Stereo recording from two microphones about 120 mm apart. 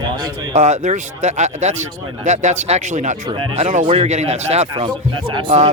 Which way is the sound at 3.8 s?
60° right (ahead or behind).